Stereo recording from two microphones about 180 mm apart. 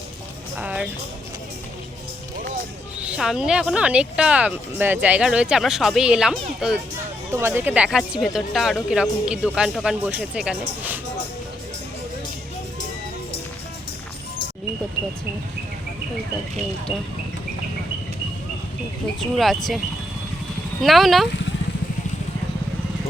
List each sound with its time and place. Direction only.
0.6 s music: 5° right (ahead or behind)
3.0 s speech: 5° right (ahead or behind)
7.3 s speech: 15° right (ahead or behind)
19.2 s speech: centre (ahead or behind)
20.8 s speech: centre (ahead or behind)